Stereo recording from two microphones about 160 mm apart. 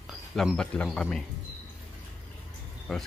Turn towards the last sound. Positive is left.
turn(degrees=0)  # may be behind; listen again after turning